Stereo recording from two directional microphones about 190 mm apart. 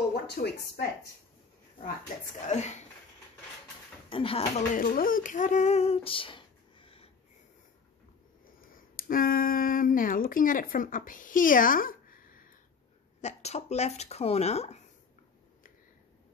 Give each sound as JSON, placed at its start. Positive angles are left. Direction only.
{"t": 0.1, "sound": "a woman's voice", "side_deg": 55}
{"t": 2.4, "sound": "speech", "side_deg": 35}
{"t": 4.1, "sound": "speech", "side_deg": 25}
{"t": 4.7, "sound": "female singing", "side_deg": 45}
{"t": 8.7, "sound": "speech", "side_deg": 50}
{"t": 13.2, "sound": "speech", "side_deg": 35}